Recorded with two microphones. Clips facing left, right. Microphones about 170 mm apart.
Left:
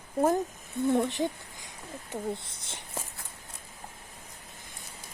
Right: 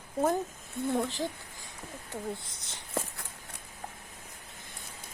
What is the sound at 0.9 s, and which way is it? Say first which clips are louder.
Speech: left 4 dB; 20° left (ahead or behind).